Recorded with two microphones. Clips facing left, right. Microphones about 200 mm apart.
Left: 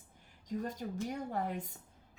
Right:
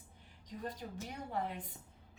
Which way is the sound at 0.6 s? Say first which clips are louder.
Left 2 dB; 45° left (ahead or behind).